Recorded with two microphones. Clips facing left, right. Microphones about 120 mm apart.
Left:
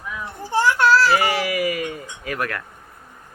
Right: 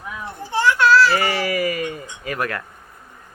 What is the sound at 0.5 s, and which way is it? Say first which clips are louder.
Children playing: right 1 dB; 45° left (ahead or behind).